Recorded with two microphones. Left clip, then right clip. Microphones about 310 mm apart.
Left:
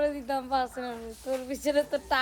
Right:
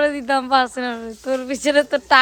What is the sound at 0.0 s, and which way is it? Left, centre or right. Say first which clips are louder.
Speech: right 10 dB; right.